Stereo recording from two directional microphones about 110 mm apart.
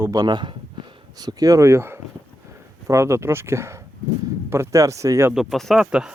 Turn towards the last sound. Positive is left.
turn(degrees=-5)  # may be behind; listen again after turning